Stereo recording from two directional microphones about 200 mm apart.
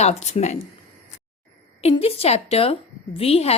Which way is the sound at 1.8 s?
30° left (ahead or behind).